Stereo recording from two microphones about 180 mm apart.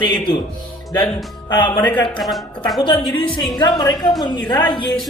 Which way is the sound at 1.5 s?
25° left (ahead or behind).